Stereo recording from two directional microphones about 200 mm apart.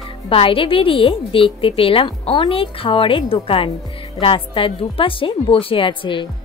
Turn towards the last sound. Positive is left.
turn(degrees=25)  # may be behind; listen again after turning